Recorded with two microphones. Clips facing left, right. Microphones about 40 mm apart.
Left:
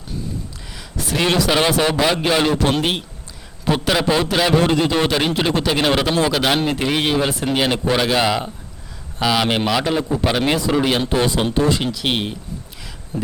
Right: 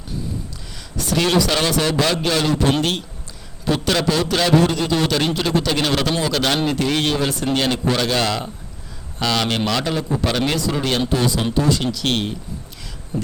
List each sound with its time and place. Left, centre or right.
0.8 s a man's voice: centre; by 11.8 s left
11.8 s a man's voice: centre